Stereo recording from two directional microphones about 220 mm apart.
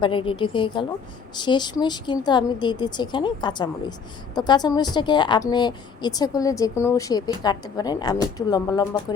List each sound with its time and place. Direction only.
0.0 s a woman's voice: 25° left (ahead or behind)